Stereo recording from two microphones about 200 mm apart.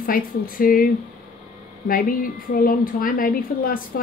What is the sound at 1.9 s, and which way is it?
A woman's voice, 45° left (ahead or behind).